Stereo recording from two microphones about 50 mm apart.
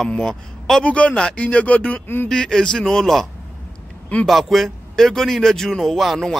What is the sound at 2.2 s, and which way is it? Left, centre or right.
A man's voice, centre.